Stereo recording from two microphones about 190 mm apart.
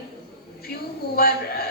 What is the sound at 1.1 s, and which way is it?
Speech, 55° left (ahead or behind).